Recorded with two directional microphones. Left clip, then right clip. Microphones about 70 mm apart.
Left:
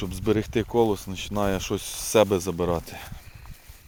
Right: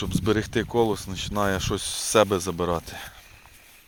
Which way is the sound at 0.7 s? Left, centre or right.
Left.